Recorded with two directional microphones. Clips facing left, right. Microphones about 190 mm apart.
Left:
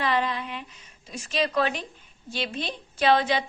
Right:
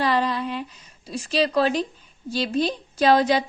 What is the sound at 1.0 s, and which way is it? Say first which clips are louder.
A woman's voice: right 5 dB; 35° right (ahead or behind).